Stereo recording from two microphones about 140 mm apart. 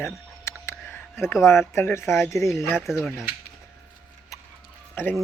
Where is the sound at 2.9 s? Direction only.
Centre (ahead or behind).